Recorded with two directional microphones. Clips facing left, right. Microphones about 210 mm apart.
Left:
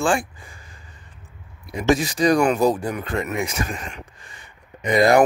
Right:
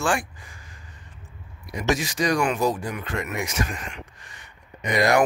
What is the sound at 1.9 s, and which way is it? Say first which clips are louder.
Speech: left 6 dB; 35° left (ahead or behind).